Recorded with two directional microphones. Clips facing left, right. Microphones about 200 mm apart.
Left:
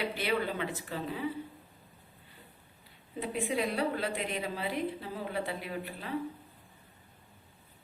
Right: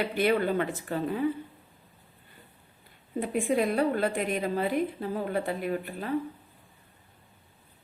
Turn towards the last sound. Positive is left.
turn(degrees=-50)  # may be behind; listen again after turning